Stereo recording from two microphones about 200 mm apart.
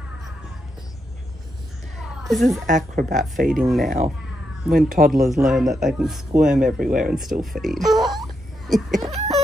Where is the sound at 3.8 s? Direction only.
35° right (ahead or behind).